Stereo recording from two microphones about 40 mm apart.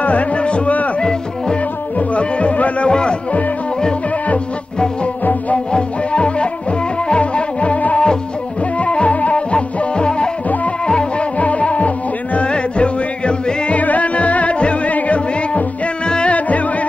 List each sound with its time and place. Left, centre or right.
0.0 s speech: left
2.9 s speech: left
5.2 s music: left
5.7 s music: left
11.3 s music: left
13.7 s music: left
16.1 s music: left
16.3 s music: left